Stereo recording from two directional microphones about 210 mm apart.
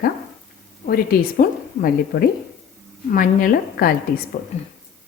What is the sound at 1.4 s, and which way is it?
A woman's voice, 45° left (ahead or behind).